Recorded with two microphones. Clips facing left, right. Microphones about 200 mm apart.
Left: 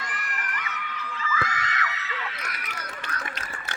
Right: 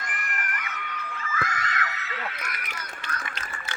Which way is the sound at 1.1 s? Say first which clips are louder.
Left 2 dB; 55° right (ahead or behind).